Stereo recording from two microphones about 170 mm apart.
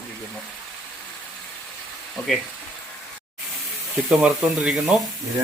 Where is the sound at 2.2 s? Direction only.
5° left (ahead or behind).